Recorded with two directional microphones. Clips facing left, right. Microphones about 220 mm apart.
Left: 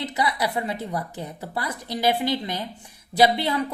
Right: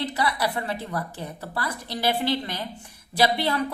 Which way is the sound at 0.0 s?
15° left (ahead or behind).